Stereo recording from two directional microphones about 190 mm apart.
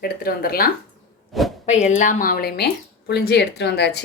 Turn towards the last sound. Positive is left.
turn(degrees=65)  # may be behind; listen again after turning